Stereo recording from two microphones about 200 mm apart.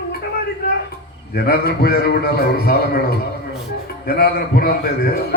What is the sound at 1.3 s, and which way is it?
A man's voice, 50° left (ahead or behind).